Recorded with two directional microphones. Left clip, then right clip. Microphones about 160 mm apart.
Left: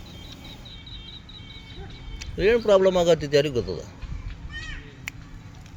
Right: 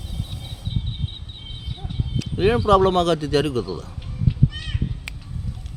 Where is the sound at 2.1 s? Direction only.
50° right (ahead or behind).